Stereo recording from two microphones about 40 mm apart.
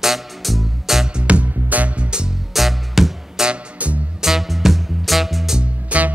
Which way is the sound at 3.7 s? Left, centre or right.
Right.